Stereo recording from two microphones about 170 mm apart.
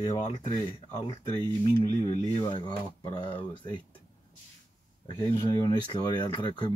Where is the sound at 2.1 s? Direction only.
25° left (ahead or behind).